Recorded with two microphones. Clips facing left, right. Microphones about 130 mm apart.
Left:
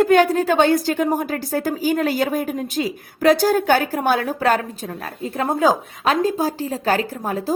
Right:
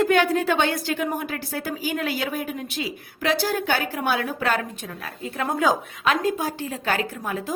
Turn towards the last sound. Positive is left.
turn(degrees=35)  # may be behind; listen again after turning